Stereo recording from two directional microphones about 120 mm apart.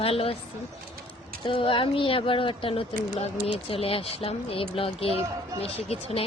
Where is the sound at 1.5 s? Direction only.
45° left (ahead or behind).